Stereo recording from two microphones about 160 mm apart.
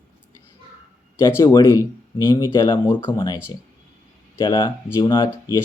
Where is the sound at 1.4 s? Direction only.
20° left (ahead or behind).